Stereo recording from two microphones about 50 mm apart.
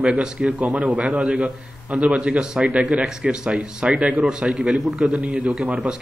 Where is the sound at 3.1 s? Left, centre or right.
Centre.